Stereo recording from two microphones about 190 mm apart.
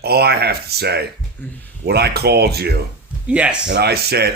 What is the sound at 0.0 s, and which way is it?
Speech, 55° right (ahead or behind).